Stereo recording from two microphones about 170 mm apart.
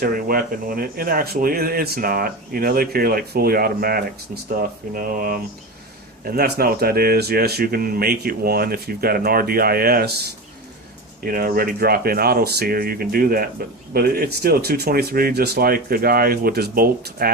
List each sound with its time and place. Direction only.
0.0 s speech: 55° right (ahead or behind)